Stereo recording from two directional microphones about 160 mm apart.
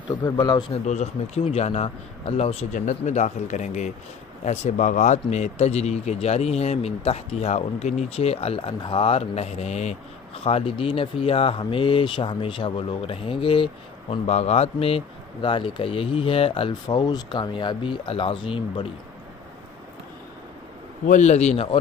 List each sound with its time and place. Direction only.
0.2 s a man's voice: 25° left (ahead or behind)
0.8 s a man's voice: 45° left (ahead or behind)
21.1 s a man's voice: 45° left (ahead or behind)